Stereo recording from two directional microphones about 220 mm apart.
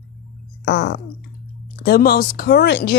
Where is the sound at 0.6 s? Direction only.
50° left (ahead or behind).